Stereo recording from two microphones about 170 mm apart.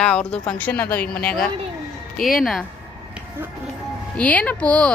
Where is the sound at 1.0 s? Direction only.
60° left (ahead or behind).